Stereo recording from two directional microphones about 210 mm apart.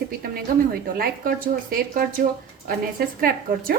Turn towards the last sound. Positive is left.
turn(degrees=-45)  # may be behind; listen again after turning